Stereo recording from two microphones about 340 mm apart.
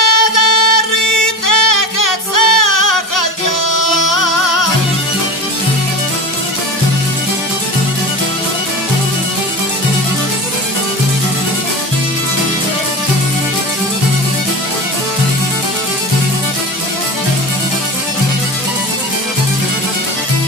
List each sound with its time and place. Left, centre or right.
0.0 s music: left